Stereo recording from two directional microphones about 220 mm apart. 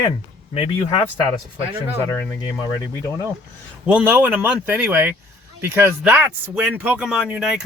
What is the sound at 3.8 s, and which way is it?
Speech, 5° right (ahead or behind).